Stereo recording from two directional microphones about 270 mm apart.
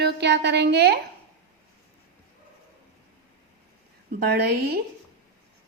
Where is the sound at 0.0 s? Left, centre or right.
Right.